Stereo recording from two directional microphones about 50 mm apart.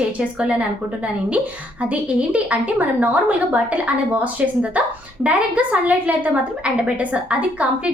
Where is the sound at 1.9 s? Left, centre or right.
Right.